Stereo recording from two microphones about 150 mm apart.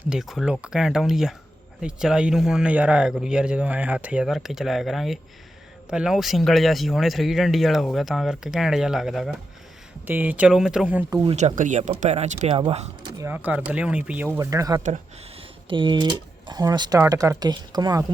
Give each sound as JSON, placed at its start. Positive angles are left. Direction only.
{"t": 0.0, "sound": "speech", "side_deg": -5}
{"t": 11.3, "sound": "speech", "side_deg": -50}
{"t": 13.1, "sound": "speech", "side_deg": -15}
{"t": 14.3, "sound": "speech", "side_deg": -20}
{"t": 15.4, "sound": "speech", "side_deg": -35}